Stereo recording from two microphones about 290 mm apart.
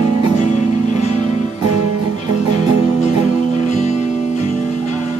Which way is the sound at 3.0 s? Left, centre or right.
Left.